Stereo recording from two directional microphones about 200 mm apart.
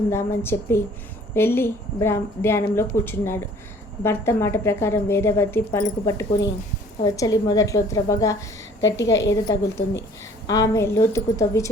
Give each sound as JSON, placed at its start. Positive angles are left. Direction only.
{"t": 0.1, "sound": "a woman's voice", "side_deg": 15}